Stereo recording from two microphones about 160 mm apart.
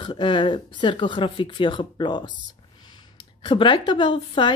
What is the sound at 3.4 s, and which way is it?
Speech, 30° left (ahead or behind).